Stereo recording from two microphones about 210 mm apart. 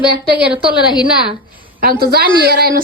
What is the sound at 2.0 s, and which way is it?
Speech, 50° right (ahead or behind).